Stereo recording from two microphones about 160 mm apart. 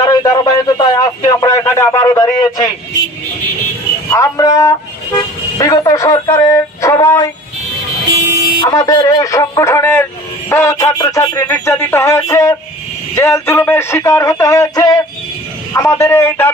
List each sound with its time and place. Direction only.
0.0 s a sound: 25° left (ahead or behind)
1.6 s a man's voice: 15° left (ahead or behind)
4.1 s speech: 20° left (ahead or behind)
8.6 s speech: 20° left (ahead or behind)